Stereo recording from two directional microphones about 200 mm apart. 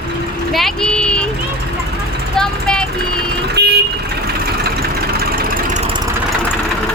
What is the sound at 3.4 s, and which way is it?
Vehicle, 55° right (ahead or behind).